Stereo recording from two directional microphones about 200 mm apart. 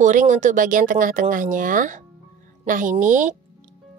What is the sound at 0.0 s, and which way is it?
A woman's voice, 40° right (ahead or behind).